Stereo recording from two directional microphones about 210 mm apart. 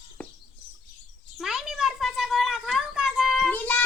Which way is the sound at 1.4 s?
Centre (ahead or behind).